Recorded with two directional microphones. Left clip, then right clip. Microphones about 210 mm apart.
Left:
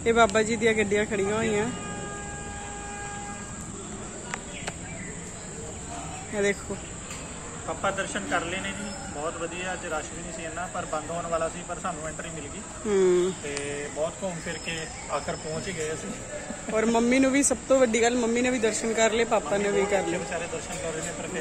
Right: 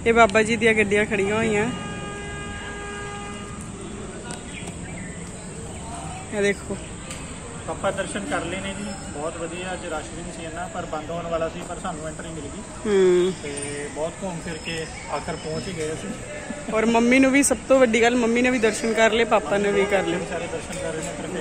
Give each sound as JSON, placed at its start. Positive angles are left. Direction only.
{"t": 0.0, "sound": "speech", "side_deg": 5}
{"t": 6.3, "sound": "speech", "side_deg": 5}
{"t": 7.8, "sound": "speech", "side_deg": 0}
{"t": 16.7, "sound": "speech", "side_deg": 5}